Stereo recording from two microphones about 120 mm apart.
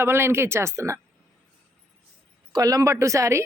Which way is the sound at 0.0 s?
20° right (ahead or behind).